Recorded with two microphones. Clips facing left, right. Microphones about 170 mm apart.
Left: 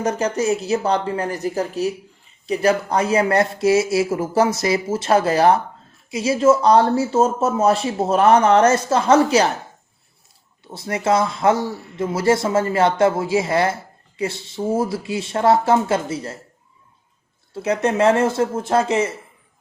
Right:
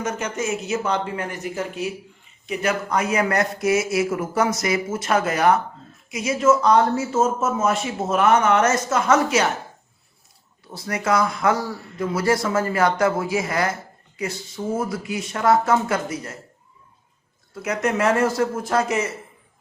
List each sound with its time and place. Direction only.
0.0 s speech: 35° left (ahead or behind)
10.7 s speech: 25° left (ahead or behind)
17.5 s speech: 30° left (ahead or behind)